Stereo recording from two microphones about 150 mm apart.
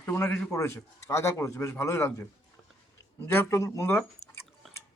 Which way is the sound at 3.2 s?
15° left (ahead or behind).